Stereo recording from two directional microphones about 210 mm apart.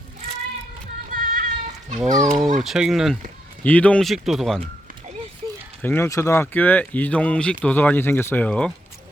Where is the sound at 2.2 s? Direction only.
Centre (ahead or behind).